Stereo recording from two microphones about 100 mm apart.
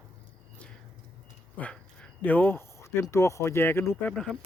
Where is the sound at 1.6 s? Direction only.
15° left (ahead or behind).